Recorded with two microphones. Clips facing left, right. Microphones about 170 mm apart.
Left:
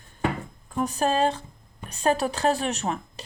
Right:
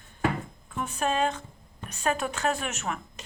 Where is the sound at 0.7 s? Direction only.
35° left (ahead or behind).